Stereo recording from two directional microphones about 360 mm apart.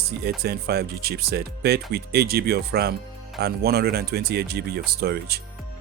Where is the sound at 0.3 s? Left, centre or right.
Right.